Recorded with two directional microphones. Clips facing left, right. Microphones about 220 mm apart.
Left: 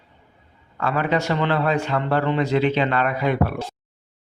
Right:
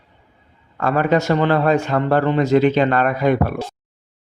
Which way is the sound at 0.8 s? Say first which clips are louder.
Right 5 dB; 45° right (ahead or behind).